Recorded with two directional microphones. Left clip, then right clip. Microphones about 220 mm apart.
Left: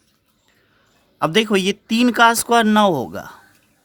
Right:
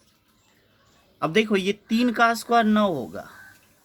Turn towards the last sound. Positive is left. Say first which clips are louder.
# left 8 dB
turn(degrees=45)  # may be behind; listen again after turning